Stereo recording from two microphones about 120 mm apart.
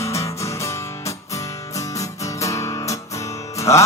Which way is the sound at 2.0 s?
25° left (ahead or behind).